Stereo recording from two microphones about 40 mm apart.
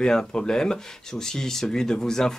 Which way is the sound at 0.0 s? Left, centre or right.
Centre.